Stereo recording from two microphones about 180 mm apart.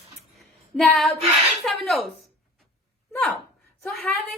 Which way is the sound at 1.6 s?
Centre (ahead or behind).